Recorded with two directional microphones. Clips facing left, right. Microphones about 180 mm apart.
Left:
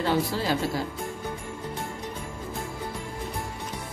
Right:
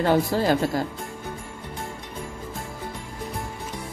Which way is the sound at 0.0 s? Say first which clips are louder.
Right 5 dB; 50° right (ahead or behind).